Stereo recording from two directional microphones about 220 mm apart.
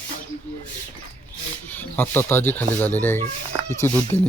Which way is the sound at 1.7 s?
10° left (ahead or behind).